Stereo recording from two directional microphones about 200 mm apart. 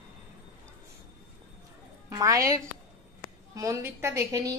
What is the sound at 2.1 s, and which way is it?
A woman's voice, 15° right (ahead or behind).